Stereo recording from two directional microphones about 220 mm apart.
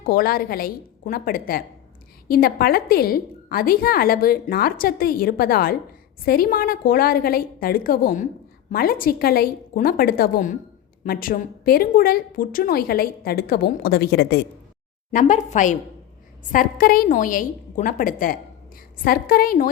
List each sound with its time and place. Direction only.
0.0 s a woman's voice: 40° left (ahead or behind)
15.1 s a woman's voice: 35° left (ahead or behind)